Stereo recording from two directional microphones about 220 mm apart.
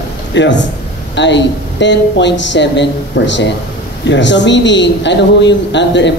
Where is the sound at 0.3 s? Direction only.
55° left (ahead or behind).